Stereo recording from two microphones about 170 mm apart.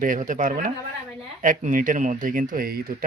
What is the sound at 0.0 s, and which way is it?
Speech, 50° right (ahead or behind).